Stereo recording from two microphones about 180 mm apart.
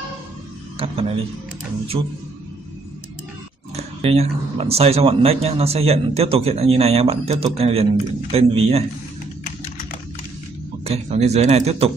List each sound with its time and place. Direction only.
0.7 s a sound: 30° right (ahead or behind)
1.9 s a man's voice: 25° right (ahead or behind)
3.7 s speech: 35° right (ahead or behind)
10.8 s speech: 35° right (ahead or behind)